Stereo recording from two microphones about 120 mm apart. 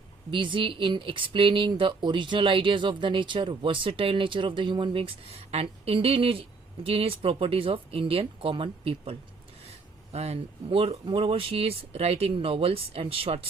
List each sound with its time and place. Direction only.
0.3 s speech: 45° right (ahead or behind)